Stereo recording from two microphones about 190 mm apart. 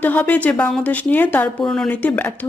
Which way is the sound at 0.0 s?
10° left (ahead or behind).